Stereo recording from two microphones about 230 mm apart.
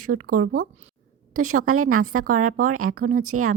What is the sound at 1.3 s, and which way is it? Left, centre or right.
Speech, right.